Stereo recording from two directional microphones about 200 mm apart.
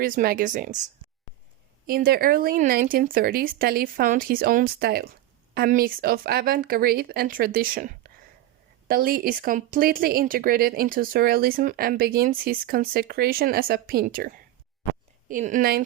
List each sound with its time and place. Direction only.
0.0 s speech: 45° right (ahead or behind)
1.9 s speech: 45° right (ahead or behind)